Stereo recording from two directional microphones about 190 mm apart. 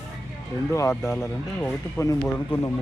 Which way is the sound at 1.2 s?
10° left (ahead or behind).